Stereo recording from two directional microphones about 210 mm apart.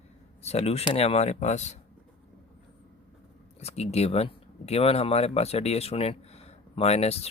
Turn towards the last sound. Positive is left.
turn(degrees=30)  # may be behind; listen again after turning